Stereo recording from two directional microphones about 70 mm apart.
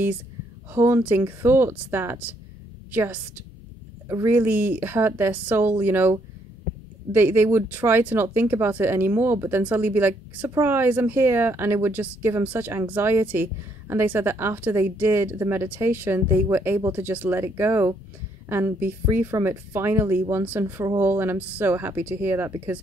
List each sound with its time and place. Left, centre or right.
0.7 s a woman's voice: right
4.3 s speech: right